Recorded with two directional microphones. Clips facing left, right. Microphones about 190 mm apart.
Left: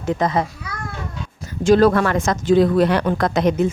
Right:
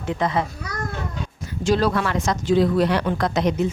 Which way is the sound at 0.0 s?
40° left (ahead or behind).